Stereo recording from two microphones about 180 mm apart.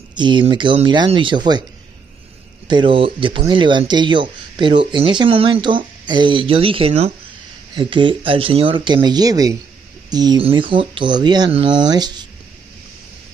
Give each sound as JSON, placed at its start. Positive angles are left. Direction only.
{"t": 0.1, "sound": "speech", "side_deg": -25}
{"t": 2.7, "sound": "speech", "side_deg": -30}